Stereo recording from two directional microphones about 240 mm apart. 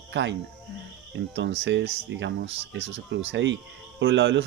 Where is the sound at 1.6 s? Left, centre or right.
Right.